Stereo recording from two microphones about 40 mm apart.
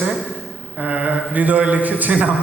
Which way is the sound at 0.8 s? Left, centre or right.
Right.